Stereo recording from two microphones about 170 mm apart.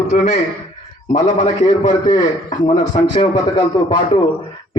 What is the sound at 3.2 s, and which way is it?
Speech, 25° left (ahead or behind).